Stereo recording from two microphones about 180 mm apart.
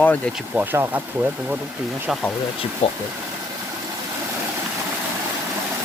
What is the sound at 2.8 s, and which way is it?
Speech, 35° left (ahead or behind).